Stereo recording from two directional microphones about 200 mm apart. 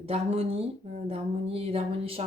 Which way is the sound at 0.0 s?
30° right (ahead or behind).